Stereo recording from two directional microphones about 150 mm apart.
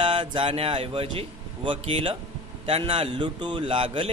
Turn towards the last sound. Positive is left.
turn(degrees=-35)  # may be behind; listen again after turning